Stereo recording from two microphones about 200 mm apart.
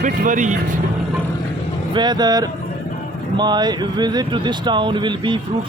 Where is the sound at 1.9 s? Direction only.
20° right (ahead or behind).